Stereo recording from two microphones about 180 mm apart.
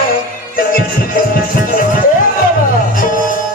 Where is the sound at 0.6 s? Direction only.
55° left (ahead or behind).